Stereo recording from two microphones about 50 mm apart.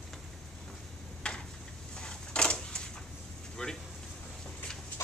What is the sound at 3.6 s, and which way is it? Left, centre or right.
Vehicle, centre.